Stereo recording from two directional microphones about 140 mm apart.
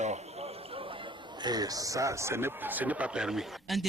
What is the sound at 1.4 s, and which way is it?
Speech, 30° right (ahead or behind).